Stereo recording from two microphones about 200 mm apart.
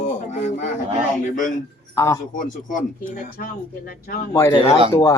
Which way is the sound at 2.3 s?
40° left (ahead or behind).